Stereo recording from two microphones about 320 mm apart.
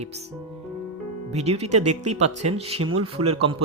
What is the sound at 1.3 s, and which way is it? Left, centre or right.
A man's voice, centre.